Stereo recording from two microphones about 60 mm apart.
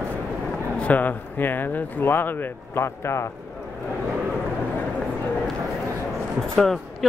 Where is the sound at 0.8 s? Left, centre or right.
Left.